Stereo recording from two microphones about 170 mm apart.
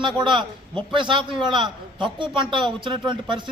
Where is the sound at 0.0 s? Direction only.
25° right (ahead or behind).